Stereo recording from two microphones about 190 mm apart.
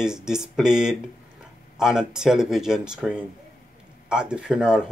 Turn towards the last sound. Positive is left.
turn(degrees=-5)  # may be behind; listen again after turning